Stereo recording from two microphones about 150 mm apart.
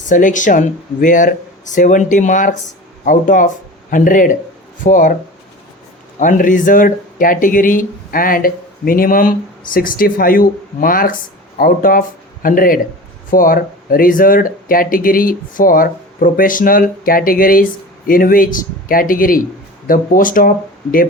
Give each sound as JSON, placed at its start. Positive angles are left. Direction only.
{"t": 0.1, "sound": "speech", "side_deg": 60}
{"t": 6.1, "sound": "speech", "side_deg": 60}